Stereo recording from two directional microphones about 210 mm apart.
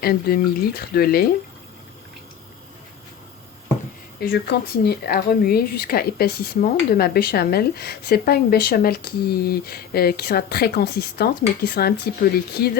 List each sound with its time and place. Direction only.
0.0 s speech: 45° left (ahead or behind)
4.2 s speech: 45° left (ahead or behind)